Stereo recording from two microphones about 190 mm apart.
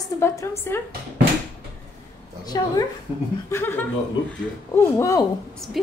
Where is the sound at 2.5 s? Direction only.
20° left (ahead or behind).